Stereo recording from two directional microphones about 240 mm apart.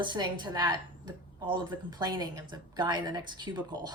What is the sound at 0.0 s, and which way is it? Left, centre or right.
Speech, centre.